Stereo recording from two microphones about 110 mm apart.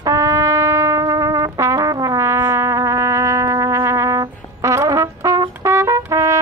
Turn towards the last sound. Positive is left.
turn(degrees=-25)  # may be behind; listen again after turning